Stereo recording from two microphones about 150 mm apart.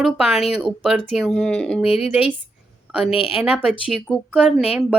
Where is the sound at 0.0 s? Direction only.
5° right (ahead or behind).